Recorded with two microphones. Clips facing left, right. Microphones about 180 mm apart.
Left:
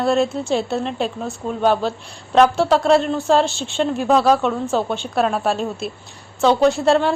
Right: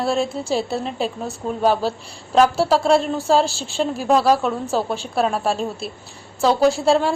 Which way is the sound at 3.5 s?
35° right (ahead or behind).